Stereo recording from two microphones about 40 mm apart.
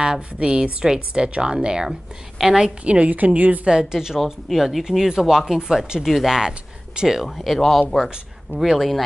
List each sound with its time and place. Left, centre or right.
0.0 s speech: right
1.9 s speech: centre
2.8 s a woman's voice: right
3.6 s speech: centre
5.9 s speech: centre